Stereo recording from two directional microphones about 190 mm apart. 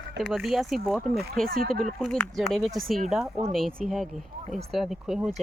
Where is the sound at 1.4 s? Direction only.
50° right (ahead or behind).